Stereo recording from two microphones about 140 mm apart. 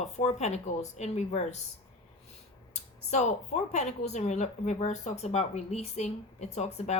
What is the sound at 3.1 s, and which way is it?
Speech, 55° left (ahead or behind).